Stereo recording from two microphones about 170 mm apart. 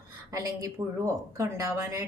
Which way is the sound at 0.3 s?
20° right (ahead or behind).